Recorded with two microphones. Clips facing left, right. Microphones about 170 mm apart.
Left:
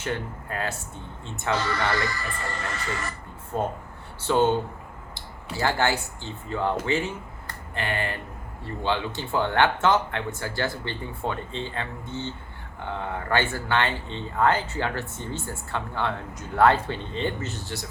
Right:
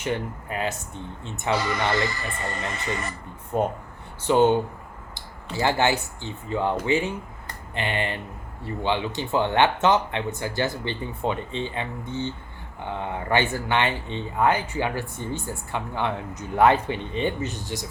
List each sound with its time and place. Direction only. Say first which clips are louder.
0.0 s speech: right 3 dB; 15° right (ahead or behind)